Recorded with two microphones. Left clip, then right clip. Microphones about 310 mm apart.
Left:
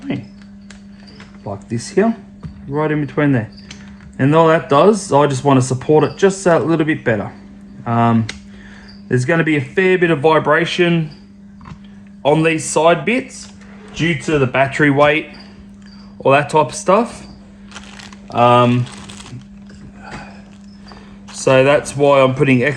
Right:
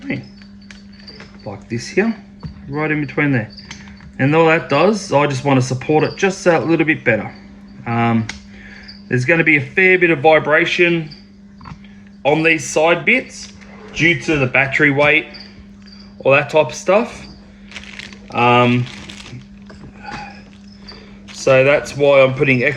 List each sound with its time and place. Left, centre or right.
2.7 s speech: centre
12.2 s speech: centre
14.7 s speech: centre
16.2 s speech: centre
18.3 s speech: centre
21.3 s speech: left